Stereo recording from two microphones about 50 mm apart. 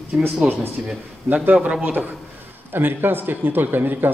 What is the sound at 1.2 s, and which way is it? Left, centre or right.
A man's voice, right.